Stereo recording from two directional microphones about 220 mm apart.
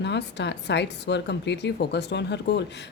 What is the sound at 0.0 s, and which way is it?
Speech, 50° left (ahead or behind).